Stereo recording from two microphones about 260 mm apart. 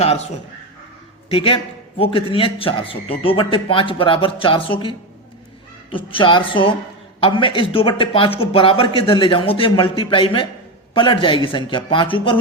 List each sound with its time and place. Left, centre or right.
1.3 s a man's voice: left